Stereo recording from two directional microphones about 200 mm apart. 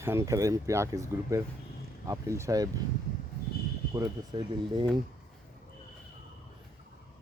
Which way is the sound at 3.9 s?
20° right (ahead or behind).